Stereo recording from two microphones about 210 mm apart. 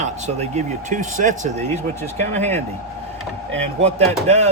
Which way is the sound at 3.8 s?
30° right (ahead or behind).